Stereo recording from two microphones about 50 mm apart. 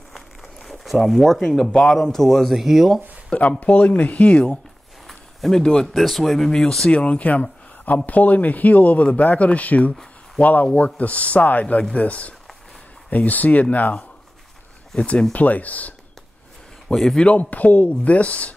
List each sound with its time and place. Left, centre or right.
0.1 s crumpling: centre
1.8 s speech: centre
2.6 s speech: centre
3.3 s speech: left
5.0 s a sound: centre
5.6 s speech: centre
5.9 s speech: centre
6.9 s speech: left
15.0 s speech: centre
15.3 s speech: left
16.9 s speech: centre
17.2 s speech: left